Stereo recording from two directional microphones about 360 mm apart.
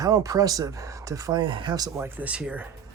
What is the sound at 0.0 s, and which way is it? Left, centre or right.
Speech, centre.